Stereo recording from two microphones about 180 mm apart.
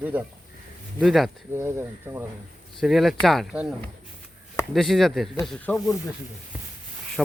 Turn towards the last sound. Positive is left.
turn(degrees=0)  # may be behind; listen again after turning